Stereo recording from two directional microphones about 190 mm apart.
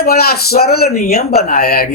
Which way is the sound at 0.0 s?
55° left (ahead or behind).